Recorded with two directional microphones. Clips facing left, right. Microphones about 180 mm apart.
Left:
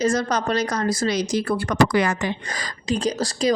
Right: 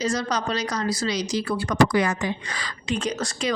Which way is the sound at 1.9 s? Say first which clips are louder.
Left 2 dB; 75° left (ahead or behind).